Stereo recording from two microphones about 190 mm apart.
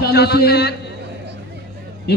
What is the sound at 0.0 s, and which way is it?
Speech, 55° left (ahead or behind).